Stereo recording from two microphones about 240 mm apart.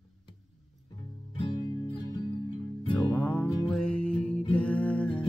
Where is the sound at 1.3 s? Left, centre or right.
Left.